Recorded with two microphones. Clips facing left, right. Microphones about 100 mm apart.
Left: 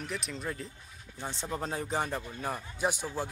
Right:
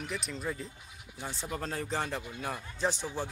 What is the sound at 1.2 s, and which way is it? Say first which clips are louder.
Speech: left 2 dB; 20° left (ahead or behind).